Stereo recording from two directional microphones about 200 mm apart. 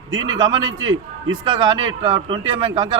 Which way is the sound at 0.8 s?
80° right.